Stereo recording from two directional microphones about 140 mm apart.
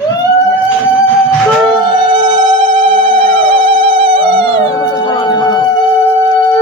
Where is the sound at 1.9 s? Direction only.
35° right (ahead or behind).